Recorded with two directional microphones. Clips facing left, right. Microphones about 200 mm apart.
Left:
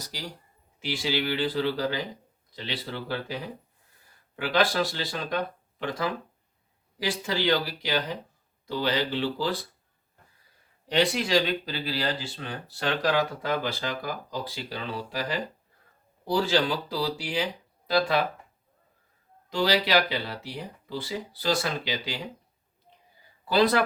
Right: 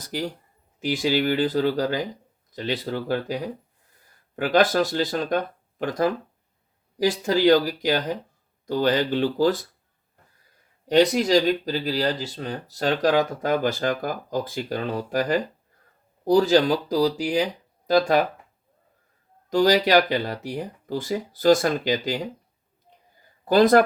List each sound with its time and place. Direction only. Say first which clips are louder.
0.0 s speech: right 10 dB; 50° right (ahead or behind)
10.8 s speech: right 7 dB; 45° right (ahead or behind)
19.5 s speech: right 6 dB; 45° right (ahead or behind)
23.5 s speech: right 7 dB; 45° right (ahead or behind)